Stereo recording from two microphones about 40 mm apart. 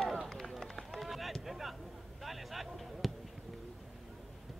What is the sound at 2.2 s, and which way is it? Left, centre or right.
Basketball bounce, centre.